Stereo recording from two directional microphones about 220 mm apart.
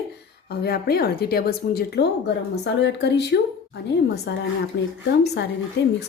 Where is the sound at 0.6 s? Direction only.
45° left (ahead or behind).